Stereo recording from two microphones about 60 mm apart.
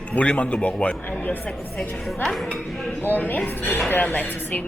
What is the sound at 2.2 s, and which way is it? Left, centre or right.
Speech, centre.